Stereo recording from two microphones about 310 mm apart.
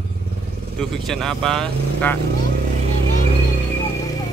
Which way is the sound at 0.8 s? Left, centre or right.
Centre.